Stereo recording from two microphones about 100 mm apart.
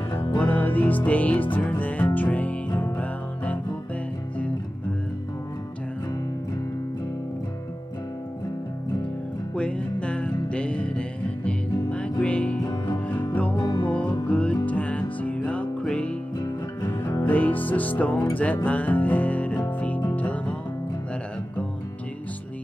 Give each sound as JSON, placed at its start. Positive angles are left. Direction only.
{"t": 0.4, "sound": "music", "side_deg": 15}
{"t": 9.6, "sound": "music", "side_deg": 10}